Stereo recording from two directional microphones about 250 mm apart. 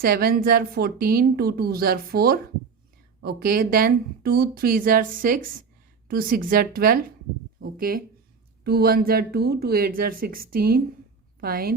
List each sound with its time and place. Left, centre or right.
0.0 s a woman's voice: right